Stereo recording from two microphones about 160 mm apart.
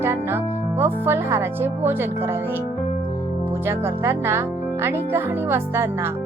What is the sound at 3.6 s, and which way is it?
Speech, 15° right (ahead or behind).